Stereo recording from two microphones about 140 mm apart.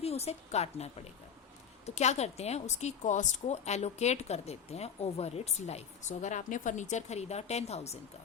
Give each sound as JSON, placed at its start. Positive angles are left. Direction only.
{"t": 0.0, "sound": "a woman's voice", "side_deg": 50}